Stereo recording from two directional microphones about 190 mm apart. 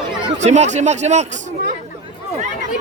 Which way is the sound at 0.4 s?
35° right (ahead or behind).